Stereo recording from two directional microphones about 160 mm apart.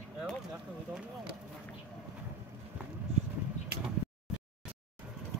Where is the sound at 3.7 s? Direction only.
85° right.